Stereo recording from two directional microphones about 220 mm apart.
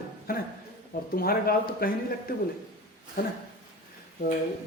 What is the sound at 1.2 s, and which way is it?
Speech, 45° left (ahead or behind).